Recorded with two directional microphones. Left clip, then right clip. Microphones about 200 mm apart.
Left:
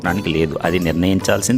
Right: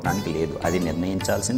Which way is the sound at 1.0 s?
70° left (ahead or behind).